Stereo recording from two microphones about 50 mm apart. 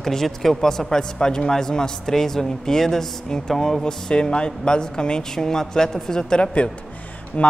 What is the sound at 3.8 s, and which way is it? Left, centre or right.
A man's voice, centre.